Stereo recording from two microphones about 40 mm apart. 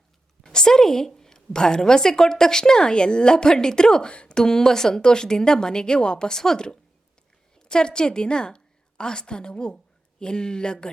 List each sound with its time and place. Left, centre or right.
0.4 s a woman's voice: centre